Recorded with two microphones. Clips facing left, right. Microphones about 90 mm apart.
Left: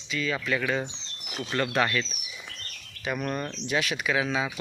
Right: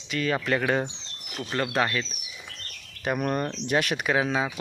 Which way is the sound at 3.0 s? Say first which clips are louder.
Right 4 dB; 50° right (ahead or behind).